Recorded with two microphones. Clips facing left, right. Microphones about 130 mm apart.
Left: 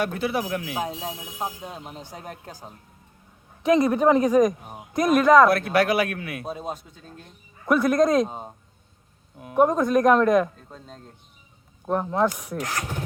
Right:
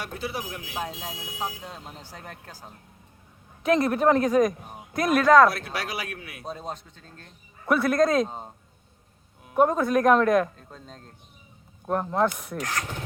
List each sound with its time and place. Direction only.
0.0 s speech: 60° left (ahead or behind); by 0.7 s 80° left
0.8 s speech: 15° left (ahead or behind)
3.6 s speech: centre (ahead or behind)
5.5 s speech: 55° left (ahead or behind)
6.4 s speech: 10° left (ahead or behind)
7.6 s speech: centre (ahead or behind)
8.3 s speech: 15° left (ahead or behind)
9.6 s speech: 5° right (ahead or behind)
12.5 s speech: 15° left (ahead or behind)